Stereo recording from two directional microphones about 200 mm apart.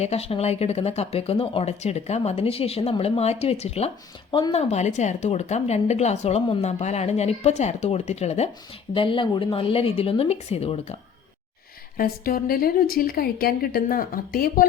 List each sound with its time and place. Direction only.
0.0 s a woman's voice: 30° left (ahead or behind)
11.9 s a woman's voice: 45° left (ahead or behind)